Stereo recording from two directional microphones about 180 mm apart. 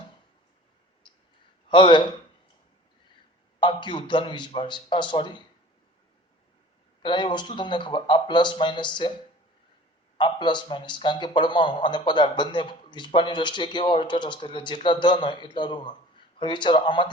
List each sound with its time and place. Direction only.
1.0 s clicking: 25° left (ahead or behind)
1.7 s a man's voice: 25° left (ahead or behind)
3.6 s a man's voice: 25° left (ahead or behind)
7.0 s a man's voice: 25° left (ahead or behind)
10.2 s a man's voice: 25° left (ahead or behind)